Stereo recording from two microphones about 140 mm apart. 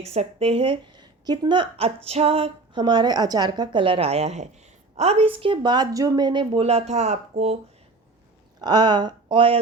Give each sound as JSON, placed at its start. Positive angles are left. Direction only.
{"t": 0.0, "sound": "a woman's voice", "side_deg": -50}
{"t": 1.7, "sound": "a woman's voice", "side_deg": -45}
{"t": 8.6, "sound": "a woman's voice", "side_deg": -30}